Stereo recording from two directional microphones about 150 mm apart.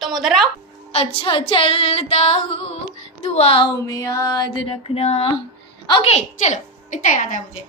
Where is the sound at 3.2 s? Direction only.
45° left (ahead or behind).